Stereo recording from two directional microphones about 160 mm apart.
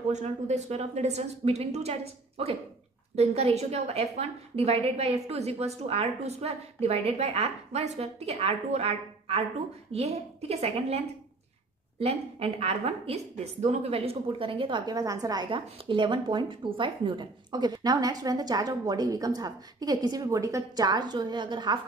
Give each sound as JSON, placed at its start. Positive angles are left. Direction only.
{"t": 0.1, "sound": "a woman's voice", "side_deg": -45}
{"t": 12.0, "sound": "a woman's voice", "side_deg": -40}